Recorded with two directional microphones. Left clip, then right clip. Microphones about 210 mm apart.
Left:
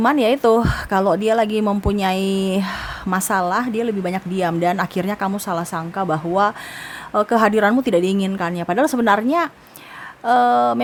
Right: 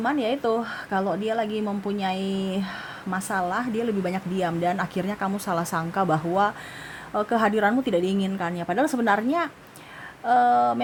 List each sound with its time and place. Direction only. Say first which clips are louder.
0.0 s a woman's voice: left 9 dB; 30° left (ahead or behind)